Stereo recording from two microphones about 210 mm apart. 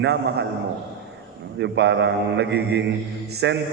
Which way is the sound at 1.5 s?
55° right (ahead or behind).